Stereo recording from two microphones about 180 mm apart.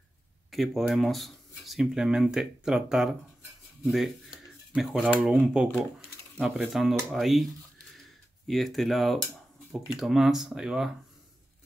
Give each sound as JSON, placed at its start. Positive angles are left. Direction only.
{"t": 0.5, "sound": "speech", "side_deg": 0}
{"t": 8.5, "sound": "speech", "side_deg": 0}